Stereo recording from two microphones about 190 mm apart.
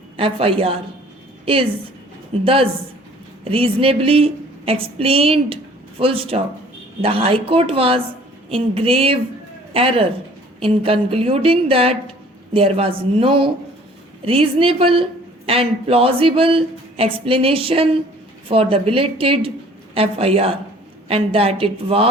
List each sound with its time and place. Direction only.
0.2 s a woman's voice: 30° right (ahead or behind)